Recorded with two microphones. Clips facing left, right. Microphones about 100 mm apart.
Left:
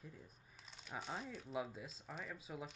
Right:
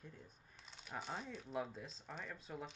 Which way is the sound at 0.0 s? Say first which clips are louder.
Even; 5° left (ahead or behind).